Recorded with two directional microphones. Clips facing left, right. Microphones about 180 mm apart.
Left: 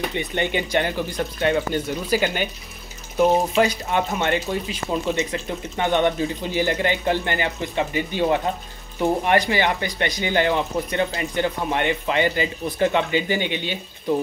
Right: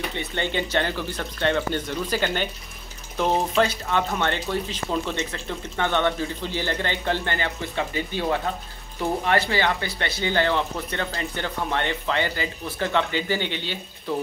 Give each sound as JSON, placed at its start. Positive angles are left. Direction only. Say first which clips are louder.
{"t": 0.1, "sound": "speech", "louder": "left 3 dB", "side_deg": 15}